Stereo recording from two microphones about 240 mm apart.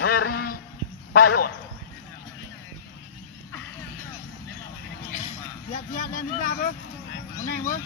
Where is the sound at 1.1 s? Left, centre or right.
Left.